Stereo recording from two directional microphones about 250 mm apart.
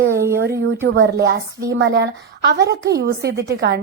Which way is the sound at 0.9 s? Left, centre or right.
Right.